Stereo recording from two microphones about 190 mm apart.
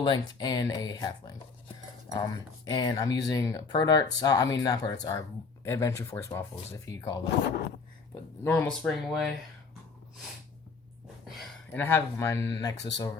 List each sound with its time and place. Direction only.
0.0 s speech: 20° left (ahead or behind)
2.1 s speech: 20° left (ahead or behind)
7.3 s speech: 60° left (ahead or behind)
8.4 s speech: 10° left (ahead or behind)
11.3 s a sound: centre (ahead or behind)
11.8 s speech: 10° left (ahead or behind)